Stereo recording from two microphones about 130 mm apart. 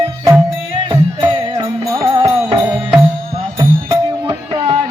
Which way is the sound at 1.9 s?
30° right (ahead or behind).